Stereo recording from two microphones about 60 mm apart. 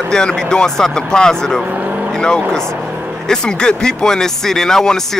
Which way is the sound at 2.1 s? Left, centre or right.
Centre.